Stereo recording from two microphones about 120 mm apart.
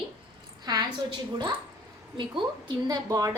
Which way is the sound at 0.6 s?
35° right (ahead or behind).